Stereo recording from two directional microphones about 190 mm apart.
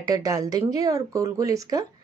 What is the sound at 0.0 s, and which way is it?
A woman's voice, 20° right (ahead or behind).